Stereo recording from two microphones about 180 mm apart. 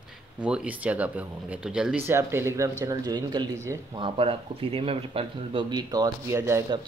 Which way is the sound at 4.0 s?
30° right (ahead or behind).